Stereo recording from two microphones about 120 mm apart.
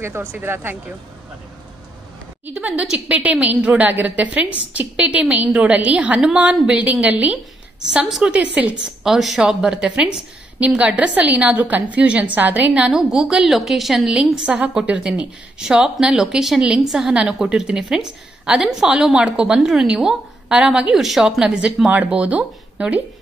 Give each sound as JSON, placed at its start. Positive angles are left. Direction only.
{"t": 0.0, "sound": "speech", "side_deg": -20}
{"t": 2.4, "sound": "a woman's voice", "side_deg": -10}